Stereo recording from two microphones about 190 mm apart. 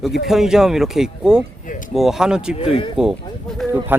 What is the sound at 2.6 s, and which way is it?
Speech, 30° left (ahead or behind).